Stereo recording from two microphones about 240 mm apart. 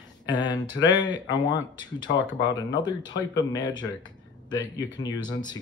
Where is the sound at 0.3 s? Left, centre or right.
Centre.